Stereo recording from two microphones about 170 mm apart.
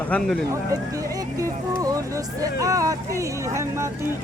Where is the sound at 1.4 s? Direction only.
20° right (ahead or behind).